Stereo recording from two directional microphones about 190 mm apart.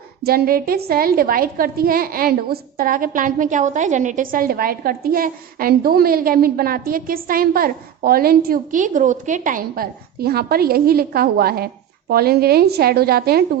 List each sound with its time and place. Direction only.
0.2 s a woman's voice: 55° right (ahead or behind)